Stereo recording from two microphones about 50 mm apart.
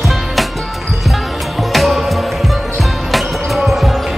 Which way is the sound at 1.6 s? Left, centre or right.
Centre.